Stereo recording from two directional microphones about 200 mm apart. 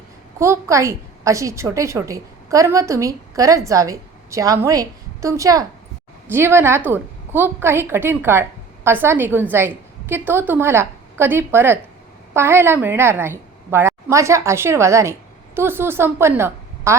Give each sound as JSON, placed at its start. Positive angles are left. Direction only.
{"t": 0.3, "sound": "a woman's voice", "side_deg": -15}